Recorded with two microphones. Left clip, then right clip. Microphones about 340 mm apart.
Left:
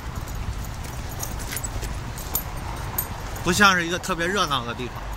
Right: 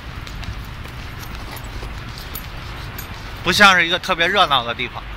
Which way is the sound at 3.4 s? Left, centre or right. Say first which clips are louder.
Right 6 dB; centre.